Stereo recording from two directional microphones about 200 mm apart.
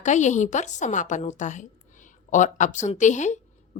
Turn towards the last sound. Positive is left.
turn(degrees=35)  # may be behind; listen again after turning